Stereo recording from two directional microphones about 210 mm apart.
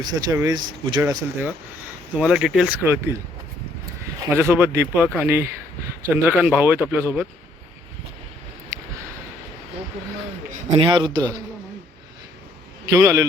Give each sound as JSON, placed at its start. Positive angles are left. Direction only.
{"t": 0.0, "sound": "speech", "side_deg": -20}
{"t": 4.4, "sound": "speech", "side_deg": -10}
{"t": 8.7, "sound": "a sound", "side_deg": -15}
{"t": 10.8, "sound": "speech", "side_deg": -20}
{"t": 12.9, "sound": "speech", "side_deg": -15}